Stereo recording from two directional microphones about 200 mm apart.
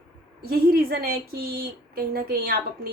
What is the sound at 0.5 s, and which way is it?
Speech, 50° right (ahead or behind).